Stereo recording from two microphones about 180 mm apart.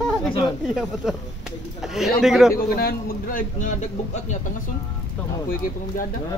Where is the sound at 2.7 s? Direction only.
55° left (ahead or behind).